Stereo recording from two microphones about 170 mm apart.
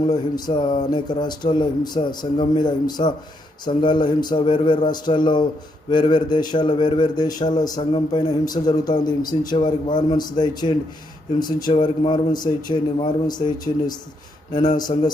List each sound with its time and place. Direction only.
0.1 s a man's voice: 25° left (ahead or behind)